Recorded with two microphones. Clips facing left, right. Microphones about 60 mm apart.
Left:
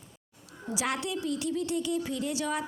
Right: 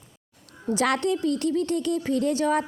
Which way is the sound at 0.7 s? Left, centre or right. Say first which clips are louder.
Right 8 dB; right.